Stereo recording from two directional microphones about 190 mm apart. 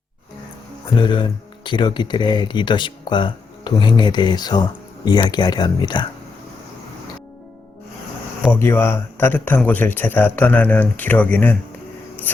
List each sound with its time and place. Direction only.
0.9 s speech: 25° left (ahead or behind)
8.5 s speech: 10° left (ahead or behind)